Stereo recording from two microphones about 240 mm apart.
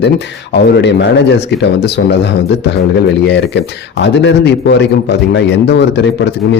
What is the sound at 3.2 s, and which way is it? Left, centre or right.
Speech, left.